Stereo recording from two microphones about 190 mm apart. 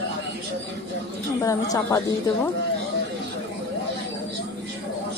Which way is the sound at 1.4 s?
20° left (ahead or behind).